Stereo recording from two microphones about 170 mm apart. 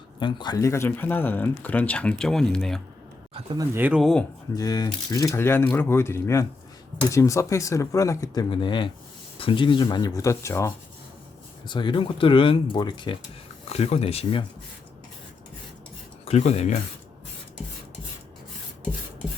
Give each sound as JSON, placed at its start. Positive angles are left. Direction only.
{"t": 0.2, "sound": "speech", "side_deg": 30}
{"t": 3.3, "sound": "speech", "side_deg": -30}
{"t": 3.8, "sound": "speech", "side_deg": -10}
{"t": 4.5, "sound": "speech", "side_deg": 20}
{"t": 11.7, "sound": "speech", "side_deg": 30}
{"t": 13.7, "sound": "speech", "side_deg": 35}
{"t": 16.2, "sound": "speech", "side_deg": 40}